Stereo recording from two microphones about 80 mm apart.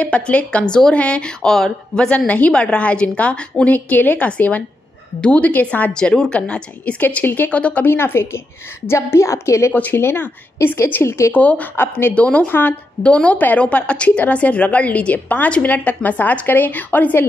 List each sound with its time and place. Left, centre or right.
0.0 s a woman's voice: centre; by 9.8 s left
9.8 s a woman's voice: left
11.3 s a woman's voice: centre